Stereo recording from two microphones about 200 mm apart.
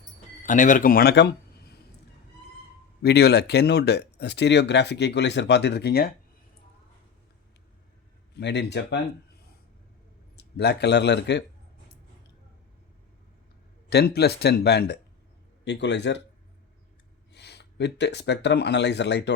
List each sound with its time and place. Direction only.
0.4 s speech: 40° left (ahead or behind)
3.0 s speech: 55° left (ahead or behind)
8.4 s speech: 60° left (ahead or behind)
10.3 s speech: 55° left (ahead or behind)
13.9 s speech: 55° left (ahead or behind)
17.3 s speech: 55° left (ahead or behind)